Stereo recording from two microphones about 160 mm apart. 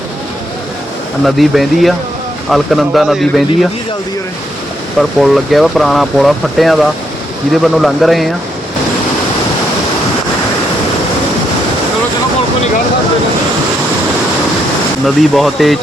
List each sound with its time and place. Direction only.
1.2 s speech: centre (ahead or behind)
4.9 s speech: centre (ahead or behind)
15.0 s speech: centre (ahead or behind)